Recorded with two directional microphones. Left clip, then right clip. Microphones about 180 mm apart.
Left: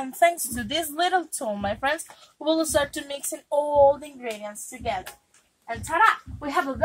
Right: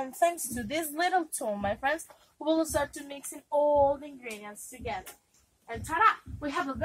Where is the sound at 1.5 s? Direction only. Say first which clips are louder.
Left 4 dB; 10° right (ahead or behind).